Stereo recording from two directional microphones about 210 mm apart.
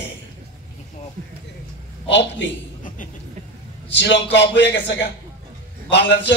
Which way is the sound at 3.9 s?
55° left (ahead or behind).